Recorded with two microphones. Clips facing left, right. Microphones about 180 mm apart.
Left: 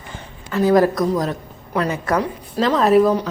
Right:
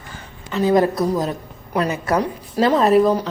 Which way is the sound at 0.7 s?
25° right (ahead or behind).